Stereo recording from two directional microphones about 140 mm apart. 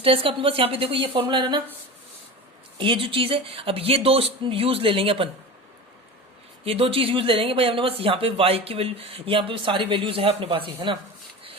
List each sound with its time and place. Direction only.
0.0 s speech: 40° right (ahead or behind)
2.7 s speech: 35° right (ahead or behind)
6.7 s speech: 40° right (ahead or behind)